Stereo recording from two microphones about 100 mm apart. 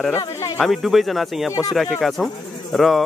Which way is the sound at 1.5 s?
35° left (ahead or behind).